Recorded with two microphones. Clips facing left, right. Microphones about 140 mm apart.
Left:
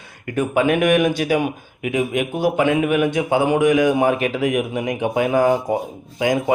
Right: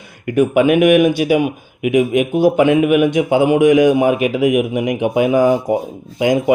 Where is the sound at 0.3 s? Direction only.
20° right (ahead or behind).